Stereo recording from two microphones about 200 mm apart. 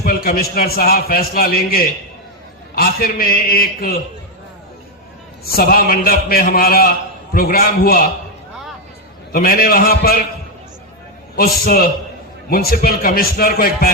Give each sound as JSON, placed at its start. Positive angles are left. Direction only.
{"t": 0.0, "sound": "a man's voice", "side_deg": 50}
{"t": 5.5, "sound": "a man's voice", "side_deg": 50}
{"t": 9.3, "sound": "a man's voice", "side_deg": 50}
{"t": 11.3, "sound": "a man's voice", "side_deg": 50}